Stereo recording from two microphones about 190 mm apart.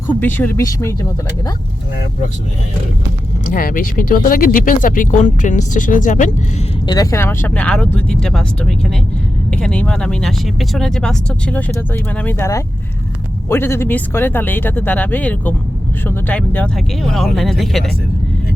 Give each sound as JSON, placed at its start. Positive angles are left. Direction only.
{"t": 0.1, "sound": "speech", "side_deg": 10}
{"t": 3.5, "sound": "speech", "side_deg": 45}
{"t": 6.8, "sound": "speech", "side_deg": 20}